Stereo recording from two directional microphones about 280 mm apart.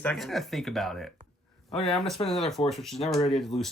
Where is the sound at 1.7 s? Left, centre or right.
Left.